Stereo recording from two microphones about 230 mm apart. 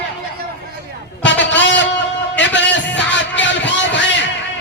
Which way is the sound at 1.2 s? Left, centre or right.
Left.